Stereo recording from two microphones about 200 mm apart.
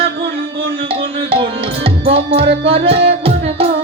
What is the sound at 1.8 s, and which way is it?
Music, 30° right (ahead or behind).